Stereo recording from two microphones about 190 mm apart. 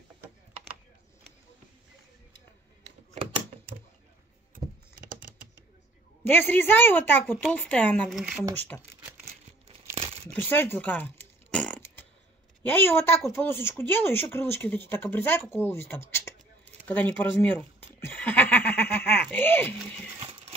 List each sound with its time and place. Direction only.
6.2 s speech: 10° left (ahead or behind)
9.9 s crumpling: 30° right (ahead or behind)
10.3 s oink: 10° left (ahead or behind)
12.6 s speech: 10° left (ahead or behind)
20.2 s a sound: 25° right (ahead or behind)